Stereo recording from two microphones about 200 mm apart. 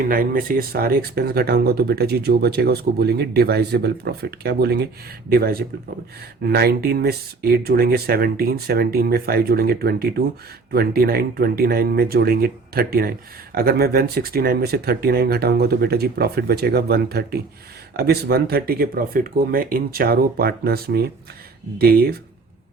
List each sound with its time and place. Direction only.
0.1 s speech: 45° right (ahead or behind)